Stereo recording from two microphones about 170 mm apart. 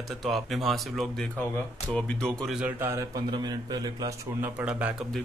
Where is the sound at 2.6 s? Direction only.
10° right (ahead or behind).